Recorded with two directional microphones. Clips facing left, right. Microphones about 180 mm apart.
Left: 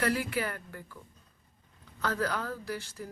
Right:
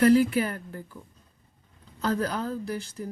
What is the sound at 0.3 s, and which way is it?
Speech, 25° right (ahead or behind).